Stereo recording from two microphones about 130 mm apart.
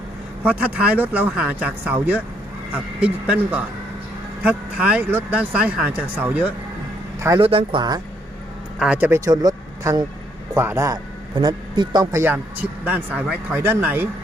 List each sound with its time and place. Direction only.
0.4 s speech: 10° right (ahead or behind)
7.4 s speech: 45° right (ahead or behind)
8.8 s speech: 10° right (ahead or behind); by 10.1 s 30° right (ahead or behind)
10.5 s speech: 20° right (ahead or behind)
10.9 s speech: 35° right (ahead or behind)
12.1 s speech: 15° right (ahead or behind)